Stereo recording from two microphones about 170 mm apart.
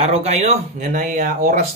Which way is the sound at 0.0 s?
40° right (ahead or behind).